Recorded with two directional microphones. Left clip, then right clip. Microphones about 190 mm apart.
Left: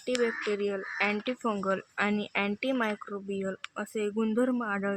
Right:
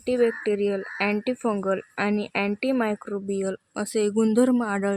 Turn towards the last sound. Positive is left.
turn(degrees=-55)  # may be behind; listen again after turning